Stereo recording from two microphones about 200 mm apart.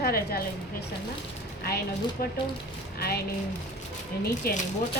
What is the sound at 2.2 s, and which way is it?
Speech, 45° left (ahead or behind).